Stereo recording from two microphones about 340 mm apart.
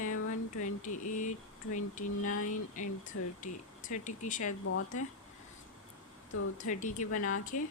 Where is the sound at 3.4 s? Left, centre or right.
Left.